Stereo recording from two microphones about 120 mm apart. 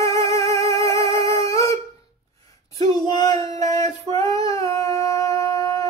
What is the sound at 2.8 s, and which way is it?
Child singing, 35° left (ahead or behind).